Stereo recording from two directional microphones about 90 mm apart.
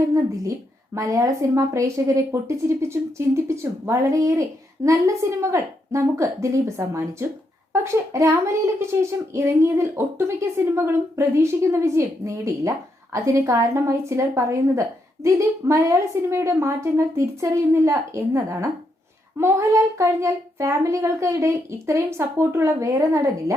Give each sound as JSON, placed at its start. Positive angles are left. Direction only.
{"t": 0.9, "sound": "speech", "side_deg": -40}